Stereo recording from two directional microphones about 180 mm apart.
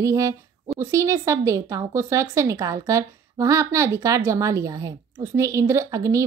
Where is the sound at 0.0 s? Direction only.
20° right (ahead or behind).